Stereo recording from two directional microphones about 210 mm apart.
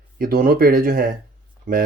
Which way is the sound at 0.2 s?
45° right (ahead or behind).